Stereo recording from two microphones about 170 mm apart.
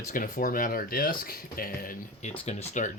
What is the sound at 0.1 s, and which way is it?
Speech, 50° left (ahead or behind).